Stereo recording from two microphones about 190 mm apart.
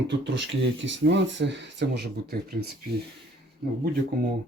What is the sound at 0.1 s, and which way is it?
Speech, 70° right (ahead or behind).